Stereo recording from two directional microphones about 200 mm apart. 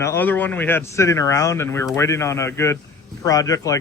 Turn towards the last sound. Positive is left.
turn(degrees=15)  # may be behind; listen again after turning